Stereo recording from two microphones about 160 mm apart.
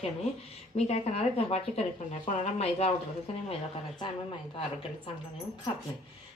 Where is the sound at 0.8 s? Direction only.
40° left (ahead or behind).